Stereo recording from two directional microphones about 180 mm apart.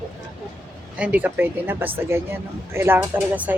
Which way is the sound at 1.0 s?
10° right (ahead or behind).